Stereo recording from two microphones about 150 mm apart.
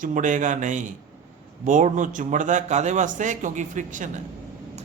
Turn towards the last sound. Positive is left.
turn(degrees=-60)  # may be behind; listen again after turning